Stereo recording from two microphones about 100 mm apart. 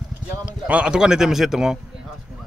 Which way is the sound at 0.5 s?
10° right (ahead or behind).